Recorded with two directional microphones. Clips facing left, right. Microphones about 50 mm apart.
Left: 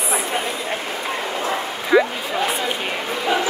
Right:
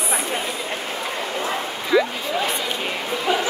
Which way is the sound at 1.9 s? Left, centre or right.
Left.